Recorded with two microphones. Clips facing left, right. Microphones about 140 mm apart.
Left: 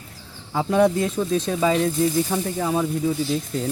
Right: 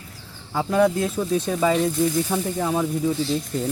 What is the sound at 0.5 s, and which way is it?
Speech, 5° left (ahead or behind).